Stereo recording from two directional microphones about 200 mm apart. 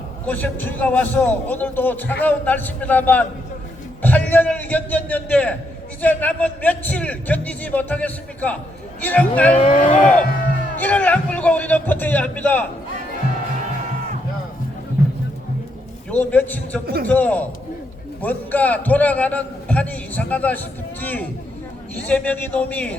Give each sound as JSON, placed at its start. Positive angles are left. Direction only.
{"t": 0.3, "sound": "a man's voice", "side_deg": 10}
{"t": 9.6, "sound": "speech", "side_deg": 30}
{"t": 10.0, "sound": "a man's voice", "side_deg": 5}
{"t": 16.0, "sound": "a man's voice", "side_deg": 10}
{"t": 16.8, "sound": "a man's voice", "side_deg": -50}
{"t": 17.1, "sound": "a man's voice", "side_deg": 10}